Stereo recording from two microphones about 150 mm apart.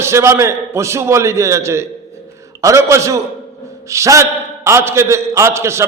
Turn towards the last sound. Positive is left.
turn(degrees=-20)  # may be behind; listen again after turning